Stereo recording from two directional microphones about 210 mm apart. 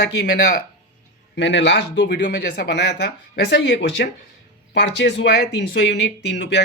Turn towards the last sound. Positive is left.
turn(degrees=55)  # may be behind; listen again after turning